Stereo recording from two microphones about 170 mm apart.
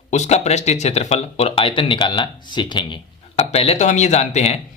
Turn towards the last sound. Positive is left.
turn(degrees=40)  # may be behind; listen again after turning